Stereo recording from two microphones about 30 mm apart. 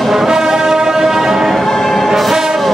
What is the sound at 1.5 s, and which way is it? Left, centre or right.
Music, centre.